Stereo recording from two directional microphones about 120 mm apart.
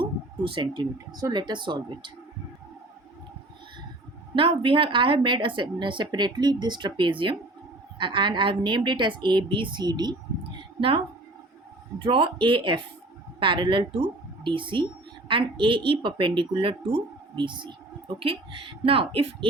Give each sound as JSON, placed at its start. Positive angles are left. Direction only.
{"t": 0.0, "sound": "speech", "side_deg": -45}
{"t": 4.4, "sound": "a woman's voice", "side_deg": -45}
{"t": 10.8, "sound": "a woman's voice", "side_deg": -50}